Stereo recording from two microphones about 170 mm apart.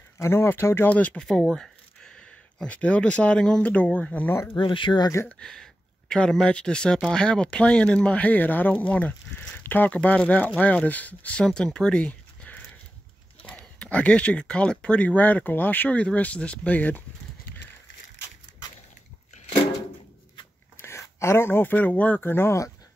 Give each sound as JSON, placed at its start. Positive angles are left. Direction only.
{"t": 0.2, "sound": "speech", "side_deg": 15}
{"t": 4.6, "sound": "speech", "side_deg": 30}
{"t": 5.4, "sound": "speech", "side_deg": 5}
{"t": 20.7, "sound": "speech", "side_deg": 15}